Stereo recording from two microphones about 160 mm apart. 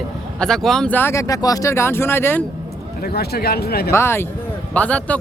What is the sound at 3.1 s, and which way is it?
Speech, 80° left.